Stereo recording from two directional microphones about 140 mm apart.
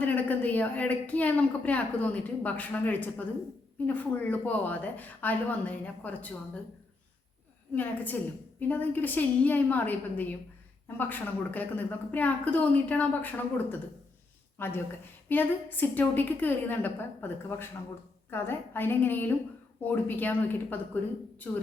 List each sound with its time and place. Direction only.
0.0 s a woman's voice: 10° left (ahead or behind)
7.8 s a woman's voice: 10° left (ahead or behind)